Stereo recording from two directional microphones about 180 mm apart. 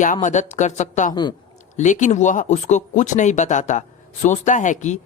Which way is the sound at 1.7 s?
40° left (ahead or behind).